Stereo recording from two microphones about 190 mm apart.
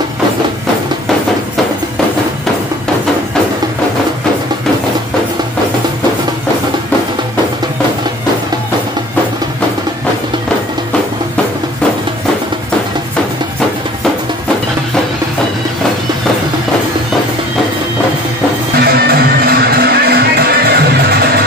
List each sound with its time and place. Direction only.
18.8 s music: 55° right (ahead or behind)